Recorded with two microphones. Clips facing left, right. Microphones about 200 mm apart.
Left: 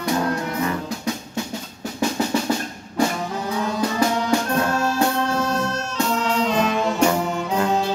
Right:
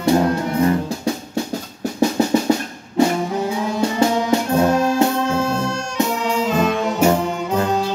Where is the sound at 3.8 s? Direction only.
25° right (ahead or behind).